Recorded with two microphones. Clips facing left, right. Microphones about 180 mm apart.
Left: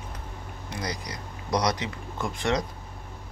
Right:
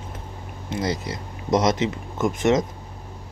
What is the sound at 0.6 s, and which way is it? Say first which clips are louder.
Speech: right 8 dB; 25° right (ahead or behind).